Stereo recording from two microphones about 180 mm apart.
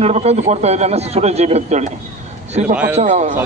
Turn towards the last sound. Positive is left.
turn(degrees=-40)  # may be behind; listen again after turning